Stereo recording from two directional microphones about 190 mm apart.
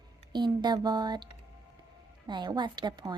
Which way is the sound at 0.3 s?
25° right (ahead or behind).